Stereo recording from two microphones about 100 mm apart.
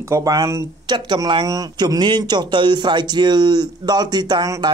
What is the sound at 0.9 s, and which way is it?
Speech, 50° right (ahead or behind).